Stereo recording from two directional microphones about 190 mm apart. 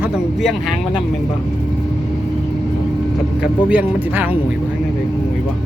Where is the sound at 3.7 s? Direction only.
10° right (ahead or behind).